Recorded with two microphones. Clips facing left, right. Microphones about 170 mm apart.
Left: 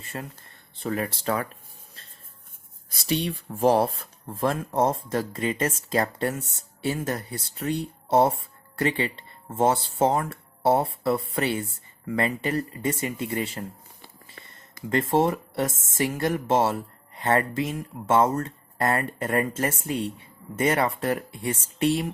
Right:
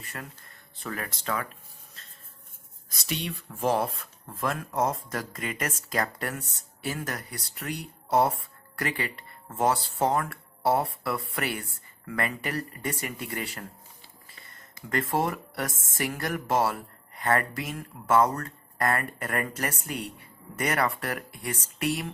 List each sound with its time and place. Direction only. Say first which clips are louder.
0.0 s speech: left 5 dB; 25° left (ahead or behind)
2.9 s speech: left 7 dB; 30° left (ahead or behind)
14.4 s a sound: left 7 dB; 55° left (ahead or behind)
14.8 s speech: left 5 dB; 25° left (ahead or behind)